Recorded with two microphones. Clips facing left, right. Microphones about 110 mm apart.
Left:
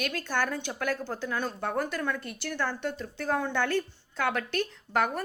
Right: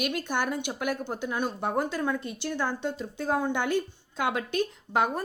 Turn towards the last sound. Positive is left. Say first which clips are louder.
# right 1 dB
turn(degrees=-15)  # may be behind; listen again after turning